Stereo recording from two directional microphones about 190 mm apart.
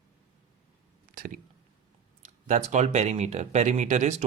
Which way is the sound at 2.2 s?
40° right (ahead or behind).